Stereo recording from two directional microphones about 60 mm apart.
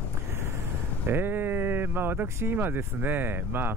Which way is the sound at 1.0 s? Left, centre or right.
Right.